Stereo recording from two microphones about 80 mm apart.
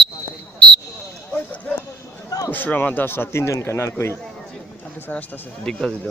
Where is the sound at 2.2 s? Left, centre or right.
Left.